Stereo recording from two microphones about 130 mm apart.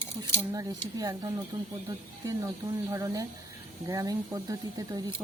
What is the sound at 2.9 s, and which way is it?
Speech, 25° right (ahead or behind).